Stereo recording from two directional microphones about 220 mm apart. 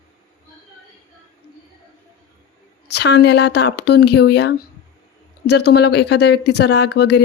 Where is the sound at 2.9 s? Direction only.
50° left (ahead or behind).